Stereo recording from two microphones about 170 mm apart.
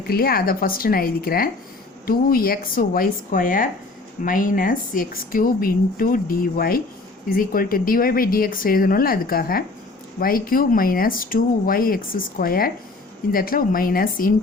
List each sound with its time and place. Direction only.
0.1 s a woman's voice: 60° left (ahead or behind)